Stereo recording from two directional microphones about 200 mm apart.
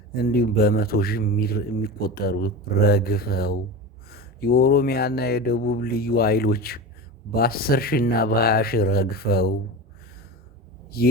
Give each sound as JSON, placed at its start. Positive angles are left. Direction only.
{"t": 0.1, "sound": "speech", "side_deg": 50}
{"t": 11.0, "sound": "speech", "side_deg": 50}